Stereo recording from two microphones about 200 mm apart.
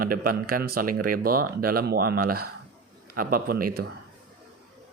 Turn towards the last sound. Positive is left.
turn(degrees=-45)  # may be behind; listen again after turning